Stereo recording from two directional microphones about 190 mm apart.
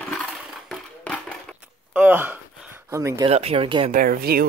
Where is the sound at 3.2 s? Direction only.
30° right (ahead or behind).